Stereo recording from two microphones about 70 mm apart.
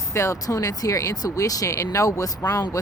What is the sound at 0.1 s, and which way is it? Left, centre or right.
Speech, left.